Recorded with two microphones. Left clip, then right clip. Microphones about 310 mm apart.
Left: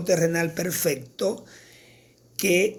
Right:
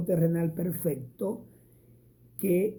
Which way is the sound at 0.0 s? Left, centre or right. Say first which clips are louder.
Left 6 dB; centre.